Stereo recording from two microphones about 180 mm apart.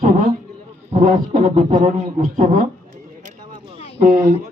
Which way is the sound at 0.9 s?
40° right (ahead or behind).